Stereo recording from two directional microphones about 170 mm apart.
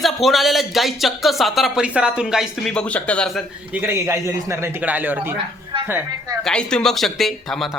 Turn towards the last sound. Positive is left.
turn(degrees=0)  # may be behind; listen again after turning